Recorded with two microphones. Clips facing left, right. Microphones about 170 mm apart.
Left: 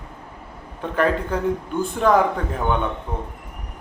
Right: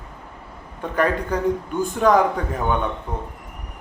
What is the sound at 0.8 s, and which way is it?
A man's voice, centre (ahead or behind).